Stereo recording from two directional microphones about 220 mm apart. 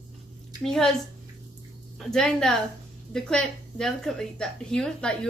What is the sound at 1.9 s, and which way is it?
A woman's voice, centre (ahead or behind).